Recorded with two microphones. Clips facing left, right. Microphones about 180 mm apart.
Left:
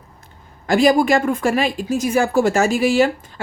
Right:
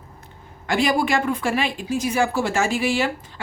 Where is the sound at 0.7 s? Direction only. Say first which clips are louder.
Left 6 dB; 40° left (ahead or behind).